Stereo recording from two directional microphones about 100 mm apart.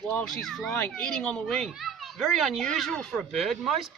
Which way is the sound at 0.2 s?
5° left (ahead or behind).